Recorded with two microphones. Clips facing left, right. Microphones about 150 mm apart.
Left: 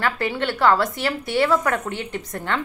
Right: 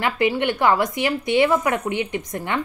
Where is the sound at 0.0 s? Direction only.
15° right (ahead or behind).